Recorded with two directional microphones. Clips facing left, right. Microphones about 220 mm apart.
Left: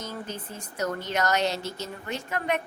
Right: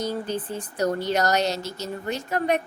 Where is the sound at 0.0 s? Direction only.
35° right (ahead or behind).